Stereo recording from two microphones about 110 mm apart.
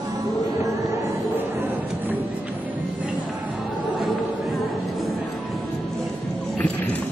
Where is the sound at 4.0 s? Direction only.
Centre (ahead or behind).